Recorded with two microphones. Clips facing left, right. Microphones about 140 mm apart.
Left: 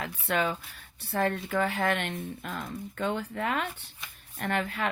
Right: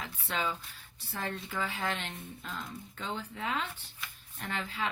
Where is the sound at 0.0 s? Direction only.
60° left (ahead or behind).